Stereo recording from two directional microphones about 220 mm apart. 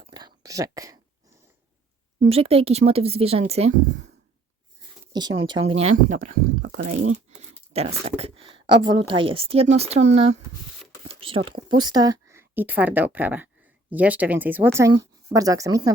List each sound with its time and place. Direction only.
0.0 s whispering: 20° right (ahead or behind)
2.2 s speech: 25° right (ahead or behind)
5.4 s speech: 25° right (ahead or behind)
6.9 s speech: 70° right (ahead or behind)
7.3 s speech: 30° right (ahead or behind)